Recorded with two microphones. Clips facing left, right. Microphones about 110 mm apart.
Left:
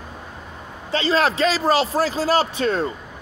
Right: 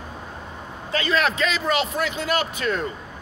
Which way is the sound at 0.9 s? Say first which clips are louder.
Left 3 dB; 30° left (ahead or behind).